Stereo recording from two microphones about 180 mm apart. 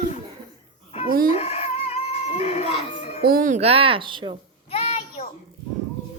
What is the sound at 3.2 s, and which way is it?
Speech, 50° right (ahead or behind).